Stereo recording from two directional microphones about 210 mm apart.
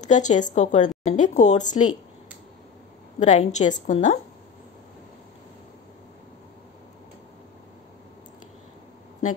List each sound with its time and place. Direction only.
0.0 s a woman's voice: 35° left (ahead or behind)
3.2 s a woman's voice: 35° left (ahead or behind)